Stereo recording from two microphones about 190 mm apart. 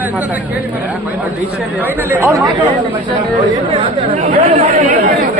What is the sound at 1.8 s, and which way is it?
Speech, 10° right (ahead or behind).